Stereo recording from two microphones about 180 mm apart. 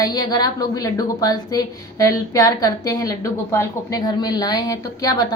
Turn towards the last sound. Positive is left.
turn(degrees=20)  # may be behind; listen again after turning